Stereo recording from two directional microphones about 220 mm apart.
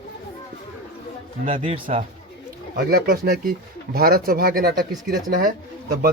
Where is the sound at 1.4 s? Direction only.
25° right (ahead or behind).